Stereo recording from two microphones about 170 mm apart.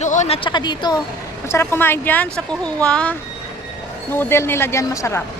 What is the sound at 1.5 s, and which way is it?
Speech, 15° left (ahead or behind).